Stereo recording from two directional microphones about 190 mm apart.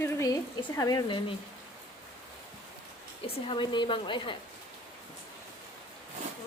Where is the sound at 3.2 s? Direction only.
25° left (ahead or behind).